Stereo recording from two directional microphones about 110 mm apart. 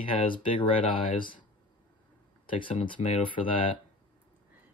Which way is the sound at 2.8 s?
50° left (ahead or behind).